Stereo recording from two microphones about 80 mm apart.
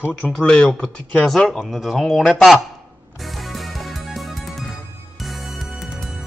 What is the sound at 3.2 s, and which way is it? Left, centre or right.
Music, centre.